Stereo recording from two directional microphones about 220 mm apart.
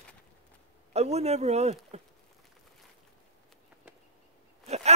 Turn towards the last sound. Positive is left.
turn(degrees=-30)  # may be behind; listen again after turning